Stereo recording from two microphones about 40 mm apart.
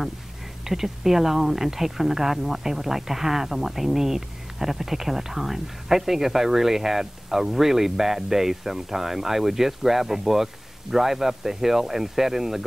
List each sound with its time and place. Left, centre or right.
0.7 s speech: centre